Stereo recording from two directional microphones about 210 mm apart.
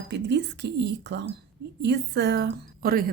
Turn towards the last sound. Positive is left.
turn(degrees=-45)  # may be behind; listen again after turning